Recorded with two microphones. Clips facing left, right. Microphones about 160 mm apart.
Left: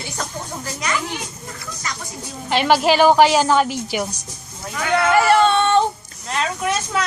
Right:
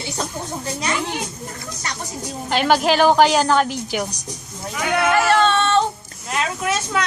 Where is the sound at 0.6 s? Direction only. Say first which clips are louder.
Right 2 dB; 30° right (ahead or behind).